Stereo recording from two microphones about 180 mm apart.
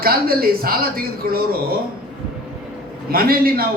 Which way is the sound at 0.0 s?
55° right (ahead or behind).